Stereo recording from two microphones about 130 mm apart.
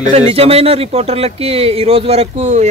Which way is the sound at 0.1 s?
50° right (ahead or behind).